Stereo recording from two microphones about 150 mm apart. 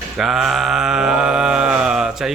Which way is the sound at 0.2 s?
Centre (ahead or behind).